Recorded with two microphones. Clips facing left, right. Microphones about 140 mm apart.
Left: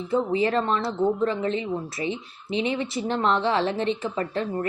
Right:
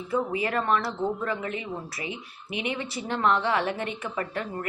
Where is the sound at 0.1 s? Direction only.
25° left (ahead or behind).